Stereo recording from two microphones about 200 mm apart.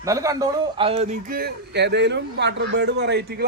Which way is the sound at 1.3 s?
50° right (ahead or behind).